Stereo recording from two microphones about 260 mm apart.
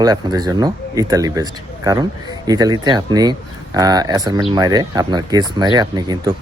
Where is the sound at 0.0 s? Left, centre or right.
Centre.